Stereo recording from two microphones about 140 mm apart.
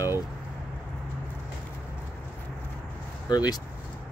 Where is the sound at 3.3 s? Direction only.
30° left (ahead or behind).